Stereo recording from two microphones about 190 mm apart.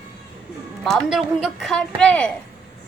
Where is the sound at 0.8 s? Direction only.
Centre (ahead or behind).